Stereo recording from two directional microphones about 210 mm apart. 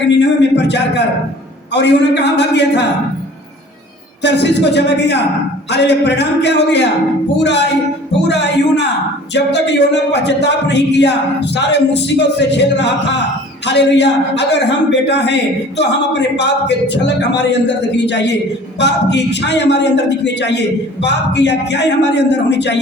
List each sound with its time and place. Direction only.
0.2 s a sound: 55° left (ahead or behind)
1.7 s a man's voice: 55° left (ahead or behind)
4.2 s a man's voice: 55° left (ahead or behind)